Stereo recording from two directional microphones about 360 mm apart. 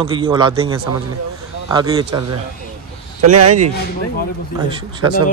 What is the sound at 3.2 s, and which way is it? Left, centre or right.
Speech, right.